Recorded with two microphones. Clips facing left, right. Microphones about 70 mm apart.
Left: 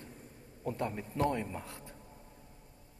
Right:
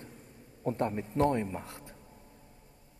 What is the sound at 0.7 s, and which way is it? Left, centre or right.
Speech, right.